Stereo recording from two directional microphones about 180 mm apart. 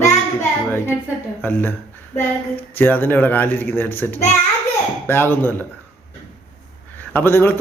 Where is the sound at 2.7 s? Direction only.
10° left (ahead or behind).